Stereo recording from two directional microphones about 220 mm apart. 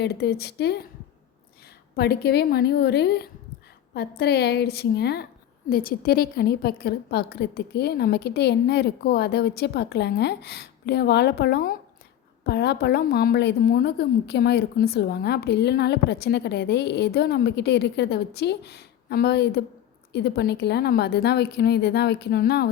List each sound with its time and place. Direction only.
0.0 s a woman's voice: 45° left (ahead or behind)
2.0 s a woman's voice: 45° left (ahead or behind)